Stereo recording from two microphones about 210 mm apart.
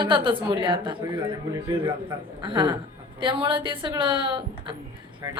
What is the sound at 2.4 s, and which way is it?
A woman's voice, 20° right (ahead or behind).